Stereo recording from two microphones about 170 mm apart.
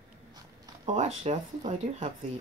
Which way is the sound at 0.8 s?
40° right (ahead or behind).